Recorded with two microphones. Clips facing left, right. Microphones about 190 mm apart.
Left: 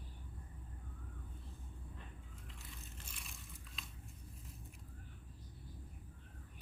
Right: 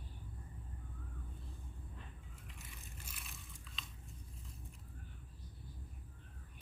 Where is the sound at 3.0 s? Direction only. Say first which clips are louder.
Even; 5° right (ahead or behind).